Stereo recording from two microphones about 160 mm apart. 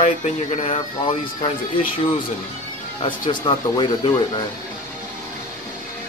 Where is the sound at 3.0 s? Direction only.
30° left (ahead or behind).